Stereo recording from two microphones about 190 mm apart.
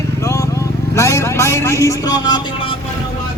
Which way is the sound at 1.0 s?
15° left (ahead or behind).